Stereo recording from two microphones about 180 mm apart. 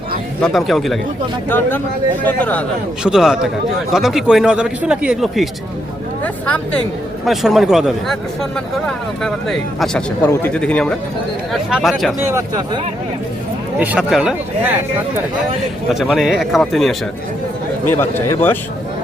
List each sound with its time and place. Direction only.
0.4 s a man's voice: centre (ahead or behind)
1.5 s a man's voice: 10° left (ahead or behind)
3.0 s a man's voice: 5° right (ahead or behind)
7.3 s a man's voice: centre (ahead or behind)
12.2 s speech: 15° right (ahead or behind)
13.7 s speech: 5° right (ahead or behind)
15.9 s a man's voice: centre (ahead or behind)
17.8 s a man's voice: 15° left (ahead or behind)